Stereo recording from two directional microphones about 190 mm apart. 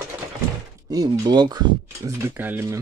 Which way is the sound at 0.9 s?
20° right (ahead or behind).